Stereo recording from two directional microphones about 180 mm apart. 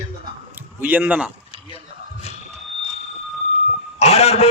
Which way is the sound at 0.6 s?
10° right (ahead or behind).